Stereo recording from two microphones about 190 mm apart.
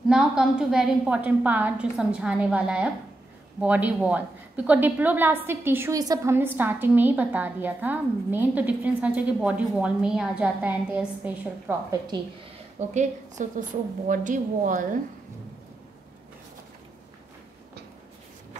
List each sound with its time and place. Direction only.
0.1 s a woman's voice: 5° right (ahead or behind)
12.9 s a woman's voice: 40° right (ahead or behind)